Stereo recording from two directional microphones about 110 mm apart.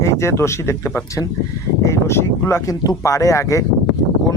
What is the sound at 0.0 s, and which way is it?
Speech, 25° left (ahead or behind).